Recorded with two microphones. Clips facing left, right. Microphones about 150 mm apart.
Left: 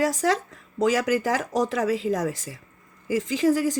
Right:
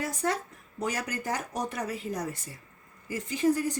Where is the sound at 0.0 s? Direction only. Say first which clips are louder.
Left 8 dB; 90° left.